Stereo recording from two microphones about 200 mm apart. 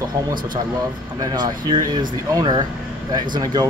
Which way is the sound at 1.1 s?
20° right (ahead or behind).